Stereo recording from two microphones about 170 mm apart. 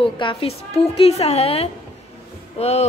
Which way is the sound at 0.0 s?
30° left (ahead or behind).